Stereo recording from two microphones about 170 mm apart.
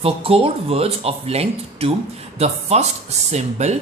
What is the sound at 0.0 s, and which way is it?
Speech, 35° right (ahead or behind).